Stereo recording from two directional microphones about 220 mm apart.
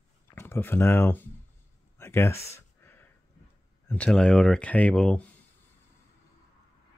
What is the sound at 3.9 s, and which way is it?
Speech, 5° left (ahead or behind).